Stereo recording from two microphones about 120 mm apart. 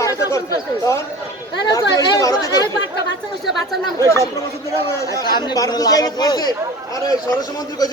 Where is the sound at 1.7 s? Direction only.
25° left (ahead or behind).